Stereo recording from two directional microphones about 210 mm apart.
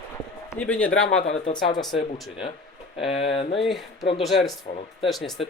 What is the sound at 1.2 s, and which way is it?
Speech, 30° left (ahead or behind).